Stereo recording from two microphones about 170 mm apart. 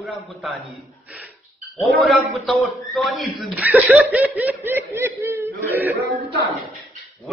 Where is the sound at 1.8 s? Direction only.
Centre (ahead or behind).